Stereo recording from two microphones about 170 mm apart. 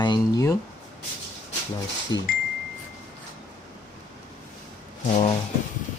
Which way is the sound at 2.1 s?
90° left.